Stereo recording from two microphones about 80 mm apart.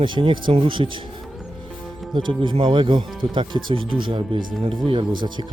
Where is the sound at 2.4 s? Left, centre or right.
Right.